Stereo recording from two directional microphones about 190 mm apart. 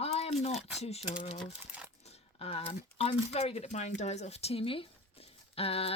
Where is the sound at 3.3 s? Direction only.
35° left (ahead or behind).